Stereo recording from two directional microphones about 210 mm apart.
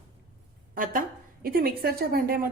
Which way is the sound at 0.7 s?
40° right (ahead or behind).